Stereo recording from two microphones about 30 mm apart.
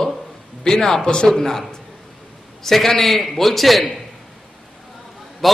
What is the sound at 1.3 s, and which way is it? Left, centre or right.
Speech, centre.